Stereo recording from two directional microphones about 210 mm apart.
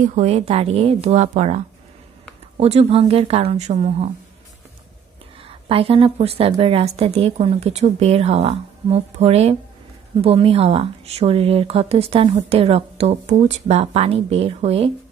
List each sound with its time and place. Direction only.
0.0 s speech: 35° right (ahead or behind)
5.4 s speech: 25° right (ahead or behind)